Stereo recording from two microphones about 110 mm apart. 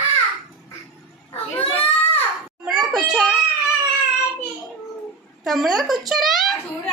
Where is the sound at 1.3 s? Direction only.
60° left (ahead or behind).